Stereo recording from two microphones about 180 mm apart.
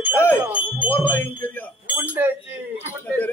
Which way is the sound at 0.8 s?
10° left (ahead or behind).